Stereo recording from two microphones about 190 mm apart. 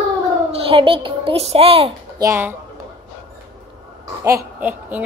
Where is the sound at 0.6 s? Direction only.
30° right (ahead or behind).